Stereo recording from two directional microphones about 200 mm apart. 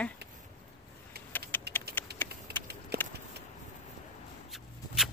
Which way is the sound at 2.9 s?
50° right (ahead or behind).